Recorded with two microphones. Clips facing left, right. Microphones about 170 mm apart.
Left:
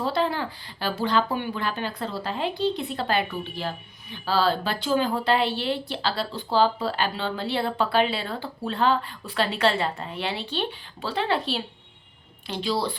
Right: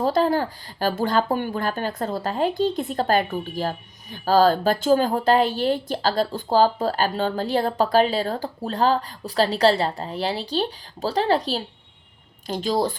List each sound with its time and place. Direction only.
0.0 s speech: 45° right (ahead or behind)